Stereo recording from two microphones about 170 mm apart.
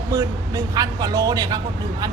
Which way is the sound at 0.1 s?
20° right (ahead or behind).